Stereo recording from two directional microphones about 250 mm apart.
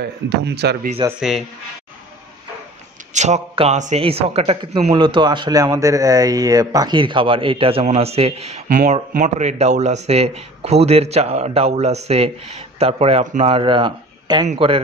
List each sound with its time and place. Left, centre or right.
0.0 s speech: right
1.0 s speech: centre
3.1 s a man's voice: right